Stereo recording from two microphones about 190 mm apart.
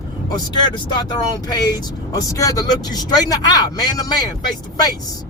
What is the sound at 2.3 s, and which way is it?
Speech, 20° left (ahead or behind).